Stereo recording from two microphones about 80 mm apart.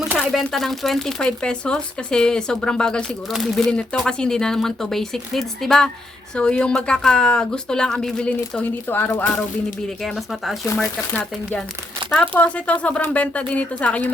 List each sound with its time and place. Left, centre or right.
0.2 s speech: centre
10.0 s speech: centre
12.1 s speech: centre